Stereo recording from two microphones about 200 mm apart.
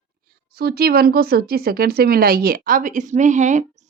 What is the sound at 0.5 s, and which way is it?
Speech, 50° right (ahead or behind).